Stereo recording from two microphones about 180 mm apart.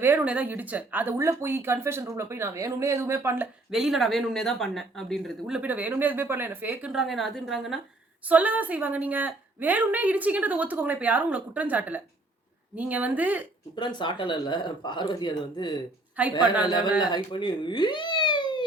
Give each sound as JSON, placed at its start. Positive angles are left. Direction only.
{"t": 0.0, "sound": "speech", "side_deg": -10}
{"t": 13.7, "sound": "speech", "side_deg": 25}
{"t": 17.4, "sound": "cat", "side_deg": 25}